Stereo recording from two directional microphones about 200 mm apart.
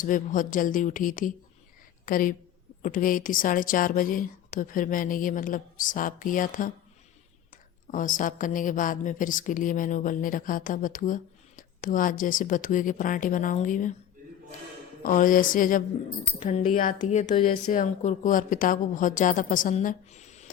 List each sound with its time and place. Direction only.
0.0 s a woman's voice: 40° left (ahead or behind)
15.0 s a woman's voice: 45° left (ahead or behind)